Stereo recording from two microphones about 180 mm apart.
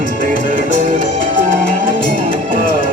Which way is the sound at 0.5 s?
45° right (ahead or behind).